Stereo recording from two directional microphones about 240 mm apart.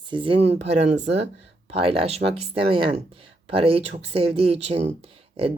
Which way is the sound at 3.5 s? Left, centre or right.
Right.